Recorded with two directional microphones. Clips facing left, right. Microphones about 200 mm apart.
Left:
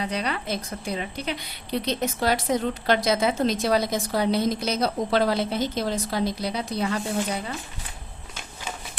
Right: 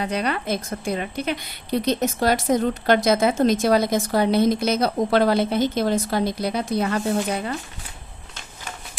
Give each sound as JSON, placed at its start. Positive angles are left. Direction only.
{"t": 0.0, "sound": "speech", "side_deg": -50}